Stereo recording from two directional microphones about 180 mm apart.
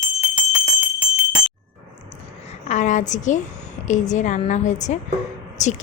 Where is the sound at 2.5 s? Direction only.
40° left (ahead or behind).